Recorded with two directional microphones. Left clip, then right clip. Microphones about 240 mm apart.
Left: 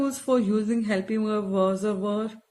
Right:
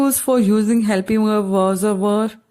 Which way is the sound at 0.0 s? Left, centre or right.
Right.